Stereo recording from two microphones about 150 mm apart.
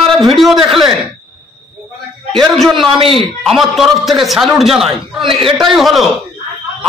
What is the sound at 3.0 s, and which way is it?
Speech, 35° right (ahead or behind).